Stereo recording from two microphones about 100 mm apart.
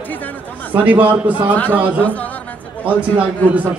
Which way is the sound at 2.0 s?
15° left (ahead or behind).